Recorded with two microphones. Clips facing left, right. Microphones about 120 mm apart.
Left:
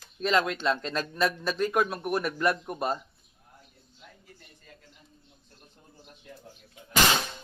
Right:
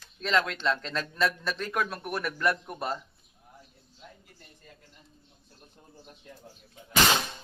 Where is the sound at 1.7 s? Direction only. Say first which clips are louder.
Left 4 dB; 20° left (ahead or behind).